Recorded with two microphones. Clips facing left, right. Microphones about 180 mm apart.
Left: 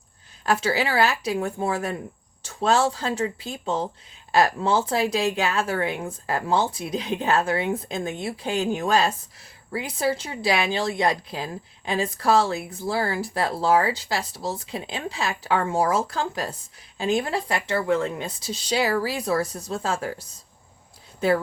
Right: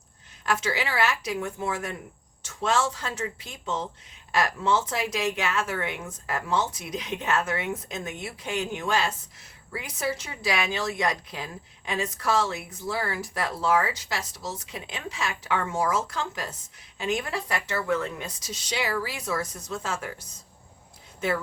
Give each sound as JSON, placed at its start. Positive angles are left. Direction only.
{"t": 0.4, "sound": "a woman's voice", "side_deg": 35}